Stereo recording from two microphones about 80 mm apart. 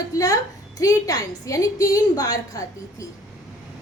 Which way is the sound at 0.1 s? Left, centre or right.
Left.